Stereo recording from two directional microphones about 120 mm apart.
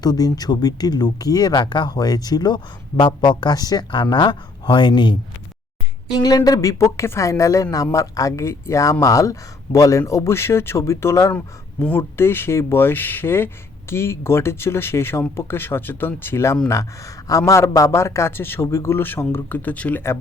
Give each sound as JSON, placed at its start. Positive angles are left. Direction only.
{"t": 0.0, "sound": "speech", "side_deg": 35}
{"t": 6.2, "sound": "a man's voice", "side_deg": 30}
{"t": 11.3, "sound": "a man's voice", "side_deg": 15}